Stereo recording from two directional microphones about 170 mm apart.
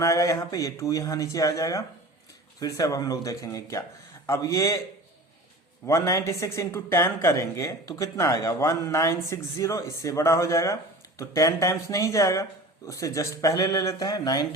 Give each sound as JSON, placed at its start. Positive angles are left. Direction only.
{"t": 0.0, "sound": "speech", "side_deg": 20}
{"t": 5.8, "sound": "speech", "side_deg": 15}